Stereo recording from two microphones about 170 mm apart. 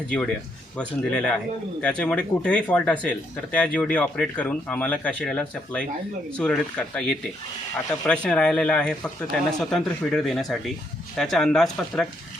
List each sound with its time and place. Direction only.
0.8 s a man's voice: 5° left (ahead or behind)